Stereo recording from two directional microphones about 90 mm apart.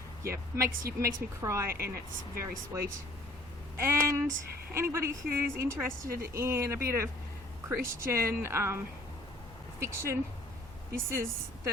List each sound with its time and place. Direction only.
0.2 s a woman's voice: 35° right (ahead or behind)
9.8 s speech: 30° right (ahead or behind)